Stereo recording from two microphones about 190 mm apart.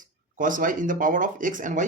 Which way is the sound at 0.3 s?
45° right (ahead or behind).